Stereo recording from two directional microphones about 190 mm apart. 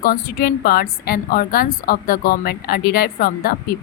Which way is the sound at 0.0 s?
50° left (ahead or behind).